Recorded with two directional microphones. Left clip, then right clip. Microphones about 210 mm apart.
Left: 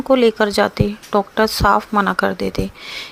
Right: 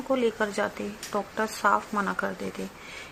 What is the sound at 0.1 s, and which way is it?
Speech, 50° left (ahead or behind).